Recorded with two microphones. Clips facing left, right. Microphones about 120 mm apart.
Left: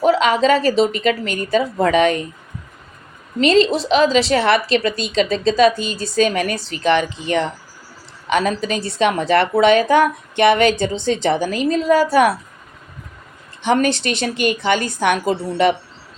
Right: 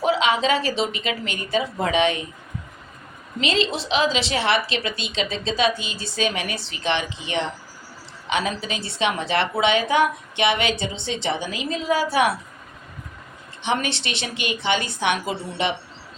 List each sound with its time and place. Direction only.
0.0 s a woman's voice: 40° left (ahead or behind)
3.4 s a woman's voice: 40° left (ahead or behind)
13.7 s a woman's voice: 45° left (ahead or behind)